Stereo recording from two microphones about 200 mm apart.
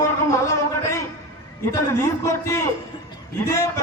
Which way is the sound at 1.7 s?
15° left (ahead or behind).